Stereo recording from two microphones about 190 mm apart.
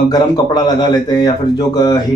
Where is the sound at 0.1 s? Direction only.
20° left (ahead or behind).